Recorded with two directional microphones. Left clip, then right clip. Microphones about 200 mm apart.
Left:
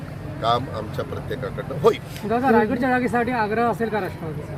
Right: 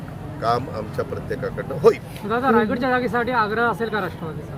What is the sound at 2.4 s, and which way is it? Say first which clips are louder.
Speech: even; 60° left (ahead or behind).